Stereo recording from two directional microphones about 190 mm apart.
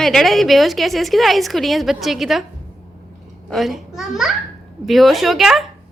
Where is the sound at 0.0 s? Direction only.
Centre (ahead or behind).